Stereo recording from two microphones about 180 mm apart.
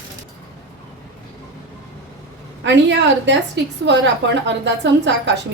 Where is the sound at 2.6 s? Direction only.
80° right.